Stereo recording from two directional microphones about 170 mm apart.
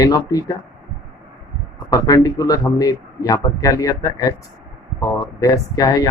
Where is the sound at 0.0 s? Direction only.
20° left (ahead or behind).